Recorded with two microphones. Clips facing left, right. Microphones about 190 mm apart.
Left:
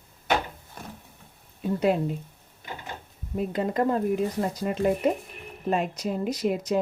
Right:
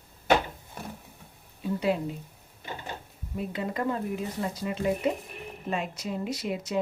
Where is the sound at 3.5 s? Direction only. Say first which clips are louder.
Left 5 dB; 40° left (ahead or behind).